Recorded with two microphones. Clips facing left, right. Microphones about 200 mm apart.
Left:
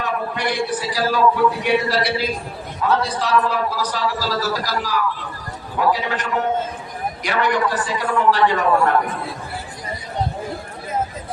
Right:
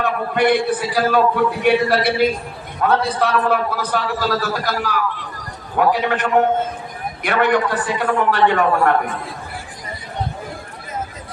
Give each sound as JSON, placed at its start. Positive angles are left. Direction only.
{"t": 0.0, "sound": "a man's voice", "side_deg": -55}